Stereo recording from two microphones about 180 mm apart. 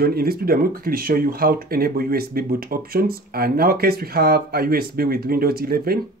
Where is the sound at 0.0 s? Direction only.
60° right (ahead or behind).